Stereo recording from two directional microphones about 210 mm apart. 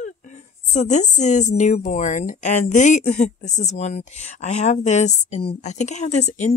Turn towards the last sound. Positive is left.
turn(degrees=35)  # may be behind; listen again after turning